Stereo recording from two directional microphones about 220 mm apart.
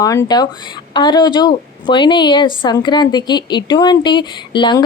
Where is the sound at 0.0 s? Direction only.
15° left (ahead or behind).